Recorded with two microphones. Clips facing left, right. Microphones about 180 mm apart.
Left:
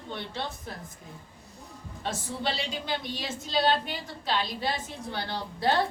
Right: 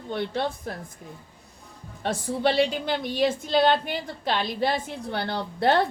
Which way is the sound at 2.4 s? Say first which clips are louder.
Right 10 dB; 55° right (ahead or behind).